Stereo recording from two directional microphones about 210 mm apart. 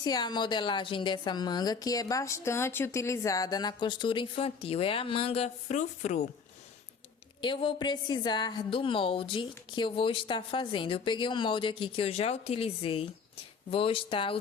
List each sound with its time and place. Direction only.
0.0 s a woman's voice: 20° left (ahead or behind)
7.4 s a woman's voice: 25° left (ahead or behind)